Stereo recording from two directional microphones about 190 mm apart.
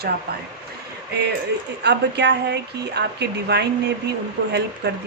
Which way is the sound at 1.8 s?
65° right (ahead or behind).